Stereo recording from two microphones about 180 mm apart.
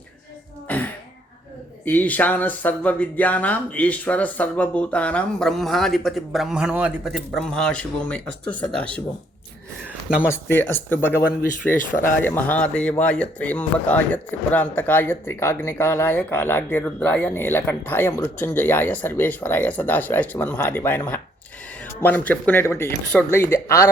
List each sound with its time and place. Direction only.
1.8 s speech: 10° left (ahead or behind)
10.2 s speech: 15° left (ahead or behind)
11.7 s speech: 50° left (ahead or behind)
12.2 s speech: 10° left (ahead or behind)